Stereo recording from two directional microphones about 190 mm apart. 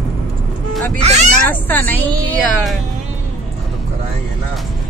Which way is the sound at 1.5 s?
10° left (ahead or behind).